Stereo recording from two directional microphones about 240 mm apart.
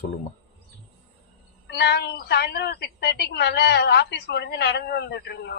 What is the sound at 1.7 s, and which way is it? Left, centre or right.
A woman's voice, left.